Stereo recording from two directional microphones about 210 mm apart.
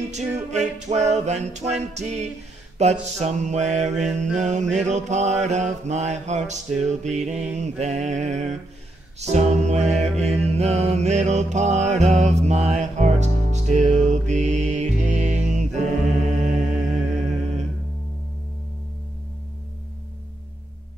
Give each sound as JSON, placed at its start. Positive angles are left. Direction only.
{"t": 0.1, "sound": "mantra", "side_deg": -35}
{"t": 10.5, "sound": "music", "side_deg": -30}